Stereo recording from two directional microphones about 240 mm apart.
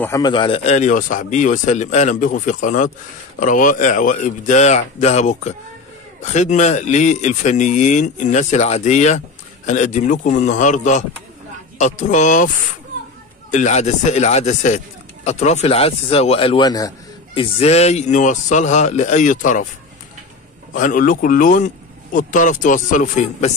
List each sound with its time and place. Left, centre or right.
0.0 s speech: centre; by 12.4 s left
13.5 s speech: left
20.7 s speech: left